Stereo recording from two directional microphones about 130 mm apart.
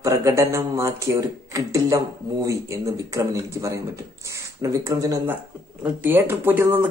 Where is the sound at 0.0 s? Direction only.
20° right (ahead or behind).